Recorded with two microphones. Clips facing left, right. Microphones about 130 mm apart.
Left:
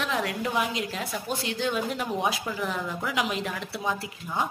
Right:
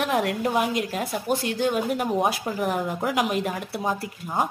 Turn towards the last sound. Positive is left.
turn(degrees=-45)  # may be behind; listen again after turning